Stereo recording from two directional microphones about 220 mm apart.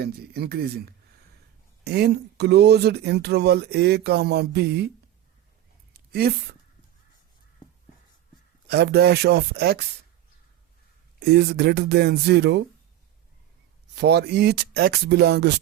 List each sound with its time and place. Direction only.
0.0 s speech: 45° right (ahead or behind)
1.8 s speech: 50° right (ahead or behind)
5.9 s a sound: 45° right (ahead or behind)
8.6 s speech: 45° right (ahead or behind)
11.3 s speech: 45° right (ahead or behind)
13.9 s speech: 50° right (ahead or behind)